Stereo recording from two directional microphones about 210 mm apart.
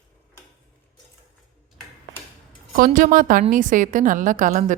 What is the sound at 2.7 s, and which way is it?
A woman's voice, 40° right (ahead or behind).